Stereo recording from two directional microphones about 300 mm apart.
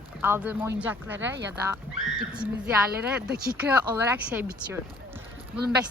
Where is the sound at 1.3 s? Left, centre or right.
Right.